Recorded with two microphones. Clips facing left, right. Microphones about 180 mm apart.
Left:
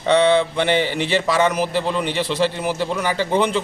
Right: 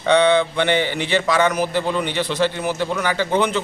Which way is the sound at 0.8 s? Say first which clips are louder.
Even; centre (ahead or behind).